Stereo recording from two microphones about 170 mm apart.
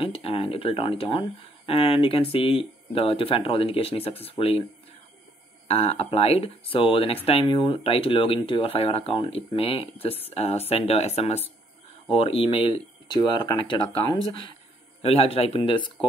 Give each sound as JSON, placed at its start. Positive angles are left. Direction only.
{"t": 0.0, "sound": "speech", "side_deg": 35}
{"t": 5.7, "sound": "speech", "side_deg": 35}